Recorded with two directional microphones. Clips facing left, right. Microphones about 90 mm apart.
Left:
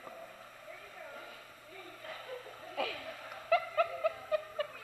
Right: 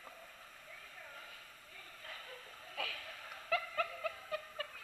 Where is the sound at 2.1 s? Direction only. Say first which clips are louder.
Left 7 dB; 25° left (ahead or behind).